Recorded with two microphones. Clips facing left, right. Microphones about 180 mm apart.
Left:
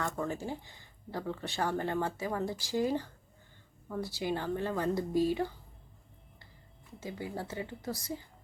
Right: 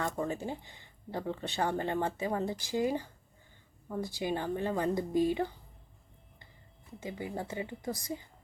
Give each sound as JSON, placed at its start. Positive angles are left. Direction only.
{"t": 0.0, "sound": "a woman's voice", "side_deg": -20}
{"t": 7.0, "sound": "a woman's voice", "side_deg": -20}